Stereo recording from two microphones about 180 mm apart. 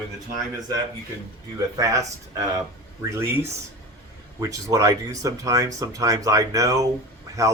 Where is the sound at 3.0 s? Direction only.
15° right (ahead or behind).